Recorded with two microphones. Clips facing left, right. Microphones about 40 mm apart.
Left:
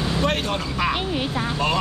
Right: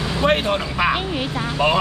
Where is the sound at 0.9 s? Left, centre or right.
Centre.